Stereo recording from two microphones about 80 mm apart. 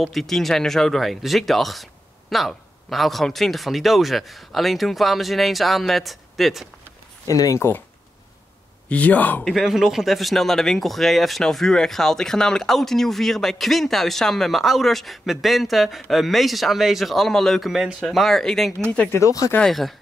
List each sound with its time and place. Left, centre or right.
0.0 s speech: centre
7.2 s speech: left
8.8 s speech: centre
9.4 s speech: centre
19.1 s speech: left
19.6 s speech: centre